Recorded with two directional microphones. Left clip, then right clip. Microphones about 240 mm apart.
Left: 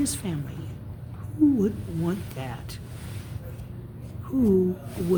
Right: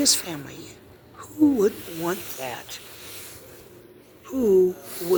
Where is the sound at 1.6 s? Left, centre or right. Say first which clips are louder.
Right 6 dB; right.